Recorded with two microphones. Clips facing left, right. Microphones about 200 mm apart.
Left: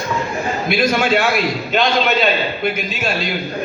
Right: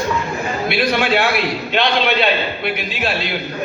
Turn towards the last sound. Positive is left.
turn(degrees=45)  # may be behind; listen again after turning